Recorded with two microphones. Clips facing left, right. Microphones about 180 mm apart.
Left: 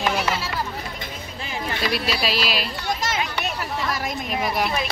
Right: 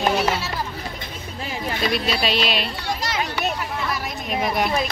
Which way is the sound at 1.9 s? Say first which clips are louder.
Right 2 dB; centre (ahead or behind).